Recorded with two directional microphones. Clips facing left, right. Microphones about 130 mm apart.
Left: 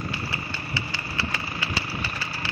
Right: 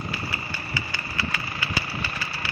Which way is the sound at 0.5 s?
30° left (ahead or behind).